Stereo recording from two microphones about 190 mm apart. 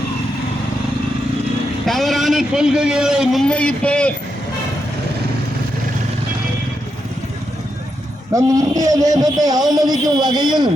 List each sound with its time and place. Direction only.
1.9 s a man's voice: centre (ahead or behind)
8.3 s speech: 20° right (ahead or behind)